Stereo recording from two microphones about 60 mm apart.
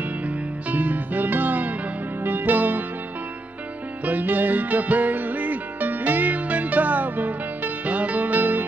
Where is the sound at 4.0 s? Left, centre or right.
Right.